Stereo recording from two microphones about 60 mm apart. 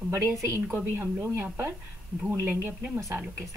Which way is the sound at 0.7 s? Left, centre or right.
Right.